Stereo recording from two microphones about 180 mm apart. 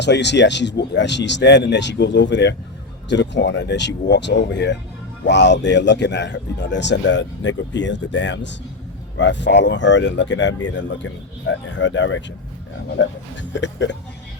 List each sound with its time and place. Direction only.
0.0 s a man's voice: 75° left (ahead or behind)